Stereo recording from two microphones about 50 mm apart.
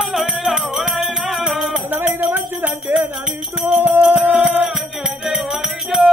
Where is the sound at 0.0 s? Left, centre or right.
Centre.